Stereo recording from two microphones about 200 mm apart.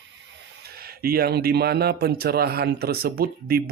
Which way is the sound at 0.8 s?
50° right (ahead or behind).